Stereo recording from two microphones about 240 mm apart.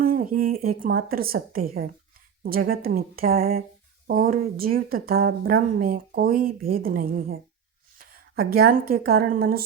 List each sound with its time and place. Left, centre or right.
0.0 s speech: right